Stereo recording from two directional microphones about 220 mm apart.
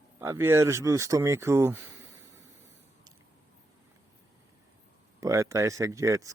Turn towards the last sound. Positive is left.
turn(degrees=-15)  # may be behind; listen again after turning